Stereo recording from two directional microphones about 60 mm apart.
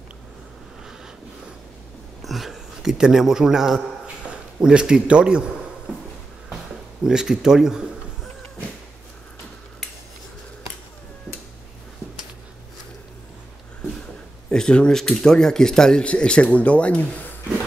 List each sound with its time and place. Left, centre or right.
2.2 s a man's voice: centre
6.5 s a sound: centre
14.5 s speech: centre